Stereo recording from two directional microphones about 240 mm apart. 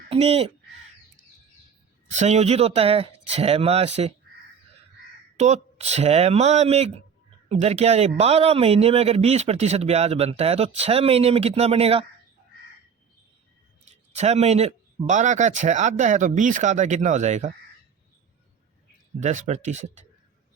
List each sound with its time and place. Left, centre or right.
0.1 s speech: right
2.0 s a man's voice: right
5.4 s a man's voice: right
13.9 s a man's voice: right
19.2 s a man's voice: right